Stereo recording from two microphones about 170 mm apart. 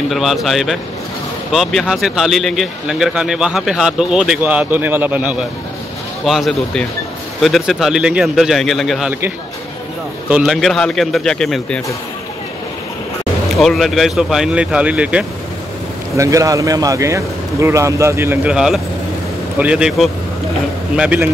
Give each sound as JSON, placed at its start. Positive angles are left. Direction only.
{"t": 0.1, "sound": "speech", "side_deg": 0}
{"t": 10.3, "sound": "speech", "side_deg": -5}
{"t": 13.6, "sound": "speech", "side_deg": 0}
{"t": 16.2, "sound": "speech", "side_deg": -20}